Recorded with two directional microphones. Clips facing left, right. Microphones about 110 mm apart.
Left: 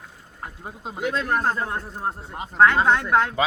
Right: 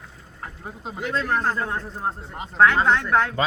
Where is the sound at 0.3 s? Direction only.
20° left (ahead or behind).